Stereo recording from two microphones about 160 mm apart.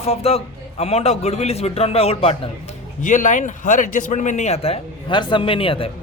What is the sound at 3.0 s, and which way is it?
A man's voice, 55° left (ahead or behind).